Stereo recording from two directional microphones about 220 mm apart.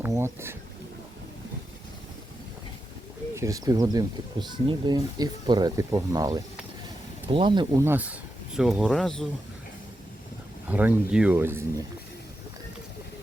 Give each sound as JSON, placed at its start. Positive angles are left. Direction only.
{"t": 0.0, "sound": "speech", "side_deg": -10}
{"t": 3.3, "sound": "speech", "side_deg": -15}
{"t": 10.7, "sound": "speech", "side_deg": -5}